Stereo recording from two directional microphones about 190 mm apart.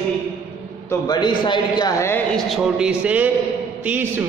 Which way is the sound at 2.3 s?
Centre (ahead or behind).